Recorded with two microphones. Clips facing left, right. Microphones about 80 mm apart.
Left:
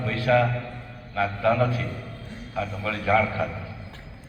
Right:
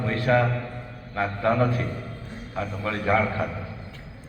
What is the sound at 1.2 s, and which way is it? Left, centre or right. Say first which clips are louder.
Speech: left 1 dB; right.